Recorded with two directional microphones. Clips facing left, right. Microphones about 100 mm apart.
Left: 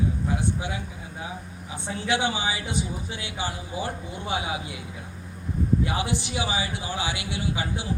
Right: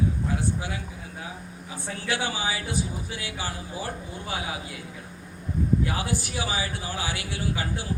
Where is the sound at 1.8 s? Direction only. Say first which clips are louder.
Left 4 dB; 20° left (ahead or behind).